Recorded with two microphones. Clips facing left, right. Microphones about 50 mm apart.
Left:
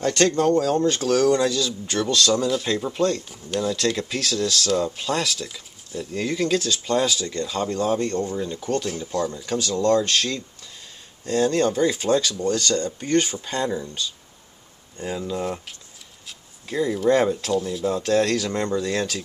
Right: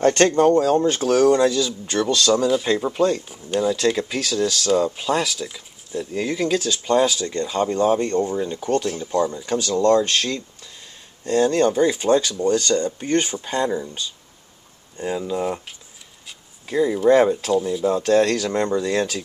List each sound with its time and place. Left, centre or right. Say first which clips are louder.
0.0 s speech: right 4 dB; right
0.3 s speech: right 4 dB; right
8.9 s speech: right 4 dB; centre
9.7 s speech: right 3 dB; right
10.1 s speech: right 1 dB; centre